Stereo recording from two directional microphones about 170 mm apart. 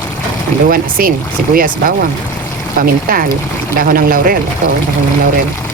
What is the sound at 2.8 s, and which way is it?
Speech, 55° right (ahead or behind).